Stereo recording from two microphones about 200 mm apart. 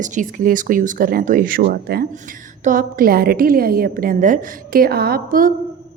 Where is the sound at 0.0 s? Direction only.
40° right (ahead or behind).